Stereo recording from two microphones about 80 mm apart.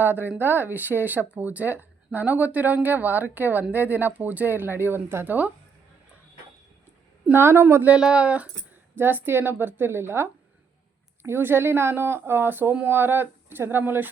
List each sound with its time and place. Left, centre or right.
0.0 s speech: right
7.3 s speech: right
7.9 s speech: centre
9.0 s speech: right